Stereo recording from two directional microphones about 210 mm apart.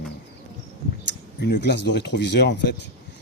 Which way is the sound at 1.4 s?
55° left (ahead or behind).